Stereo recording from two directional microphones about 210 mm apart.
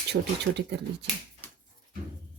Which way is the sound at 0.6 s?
55° right (ahead or behind).